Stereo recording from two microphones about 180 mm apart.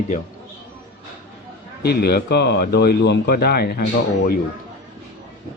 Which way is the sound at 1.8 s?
65° left (ahead or behind).